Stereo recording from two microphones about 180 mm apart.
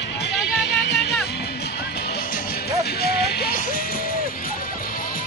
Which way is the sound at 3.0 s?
60° left (ahead or behind).